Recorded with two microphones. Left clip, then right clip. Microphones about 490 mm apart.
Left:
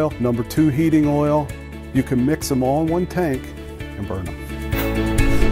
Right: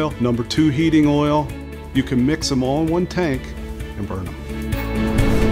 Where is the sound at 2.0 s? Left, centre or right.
Left.